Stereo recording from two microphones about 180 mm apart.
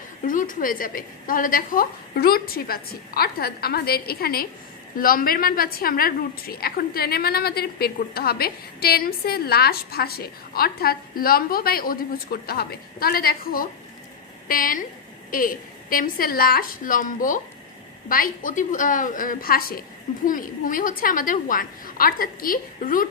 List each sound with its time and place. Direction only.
0.3 s a woman's voice: 45° left (ahead or behind)